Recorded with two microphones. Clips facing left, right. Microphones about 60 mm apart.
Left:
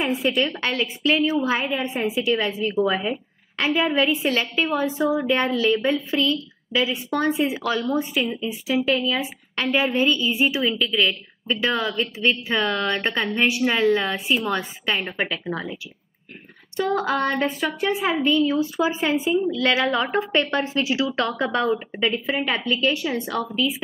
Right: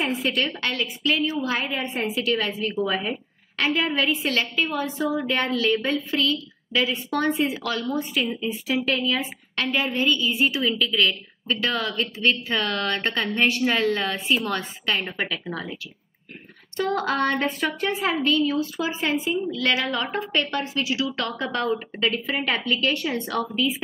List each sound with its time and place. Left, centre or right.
0.2 s a woman's voice: centre
0.6 s a woman's voice: left
2.7 s a woman's voice: centre
4.6 s a woman's voice: left
4.9 s a woman's voice: centre
5.4 s a woman's voice: centre
8.2 s a woman's voice: centre
10.6 s a woman's voice: centre
16.7 s a woman's voice: centre
18.2 s a woman's voice: centre
21.7 s a woman's voice: centre